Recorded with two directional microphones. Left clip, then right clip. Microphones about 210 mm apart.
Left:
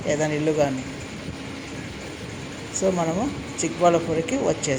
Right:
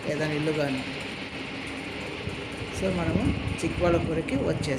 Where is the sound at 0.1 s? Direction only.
20° left (ahead or behind).